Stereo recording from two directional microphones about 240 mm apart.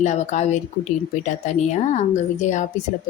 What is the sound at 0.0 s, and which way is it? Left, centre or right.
Speech, left.